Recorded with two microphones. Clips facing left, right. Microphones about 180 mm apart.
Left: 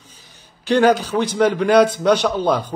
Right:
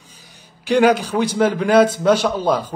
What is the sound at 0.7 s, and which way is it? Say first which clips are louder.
A man's voice: even; 10° right (ahead or behind).